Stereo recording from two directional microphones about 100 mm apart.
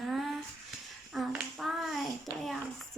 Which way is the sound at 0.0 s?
Centre (ahead or behind).